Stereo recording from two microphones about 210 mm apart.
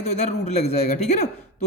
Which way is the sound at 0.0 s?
30° left (ahead or behind).